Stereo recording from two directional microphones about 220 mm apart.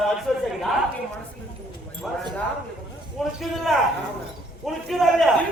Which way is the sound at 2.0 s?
Centre (ahead or behind).